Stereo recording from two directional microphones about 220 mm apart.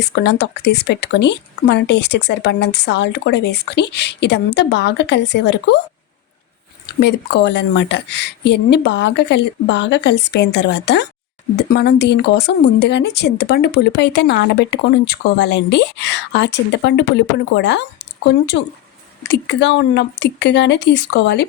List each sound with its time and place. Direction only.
0.0 s speech: 50° left (ahead or behind)
7.0 s speech: 50° left (ahead or behind)